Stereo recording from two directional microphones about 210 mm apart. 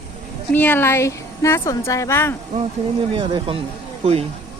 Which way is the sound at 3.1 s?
25° right (ahead or behind).